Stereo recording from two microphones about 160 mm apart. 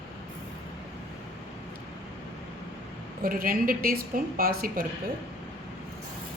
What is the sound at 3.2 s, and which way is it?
A woman's voice, 65° right (ahead or behind).